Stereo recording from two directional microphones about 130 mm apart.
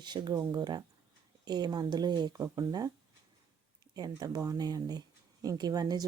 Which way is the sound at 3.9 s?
30° right (ahead or behind).